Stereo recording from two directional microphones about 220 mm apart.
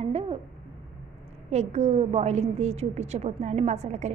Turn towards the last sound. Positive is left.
turn(degrees=-30)  # may be behind; listen again after turning